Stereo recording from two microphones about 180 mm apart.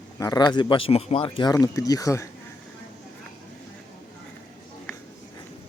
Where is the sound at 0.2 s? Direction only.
20° left (ahead or behind).